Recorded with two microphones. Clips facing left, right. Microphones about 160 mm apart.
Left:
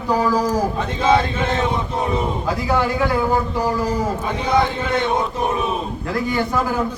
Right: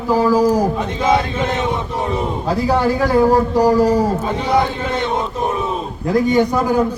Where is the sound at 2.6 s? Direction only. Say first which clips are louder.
Right 3 dB; 30° right (ahead or behind).